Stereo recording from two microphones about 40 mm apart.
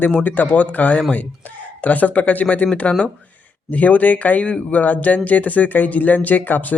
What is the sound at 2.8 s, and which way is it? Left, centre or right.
Speech, left.